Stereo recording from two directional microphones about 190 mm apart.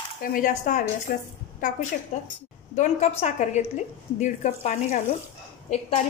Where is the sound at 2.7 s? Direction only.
40° left (ahead or behind).